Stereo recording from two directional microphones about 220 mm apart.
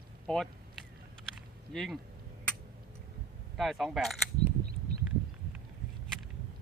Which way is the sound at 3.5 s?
Centre (ahead or behind).